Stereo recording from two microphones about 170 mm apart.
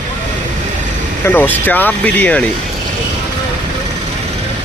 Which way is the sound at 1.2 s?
10° left (ahead or behind).